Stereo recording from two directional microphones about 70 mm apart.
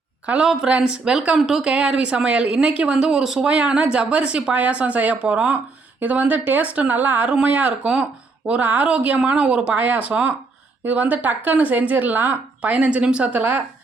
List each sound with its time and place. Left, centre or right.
0.3 s speech: centre
1.4 s a woman's voice: centre
9.7 s a woman's voice: right